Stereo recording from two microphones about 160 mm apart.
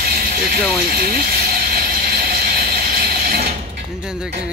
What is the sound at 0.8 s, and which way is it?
Ratchet, 65° right (ahead or behind).